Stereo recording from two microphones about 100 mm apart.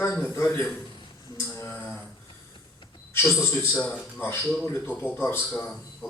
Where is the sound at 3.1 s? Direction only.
25° left (ahead or behind).